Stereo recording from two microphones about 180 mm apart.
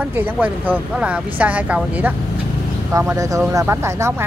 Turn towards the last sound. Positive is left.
turn(degrees=-15)  # may be behind; listen again after turning